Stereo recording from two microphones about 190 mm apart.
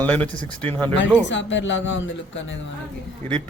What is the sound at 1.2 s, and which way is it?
Speech, 70° left (ahead or behind).